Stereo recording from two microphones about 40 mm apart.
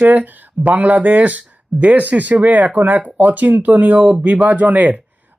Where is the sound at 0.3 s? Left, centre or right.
Right.